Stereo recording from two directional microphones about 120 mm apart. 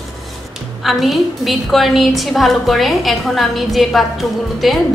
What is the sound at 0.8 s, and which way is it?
A woman's voice, centre (ahead or behind).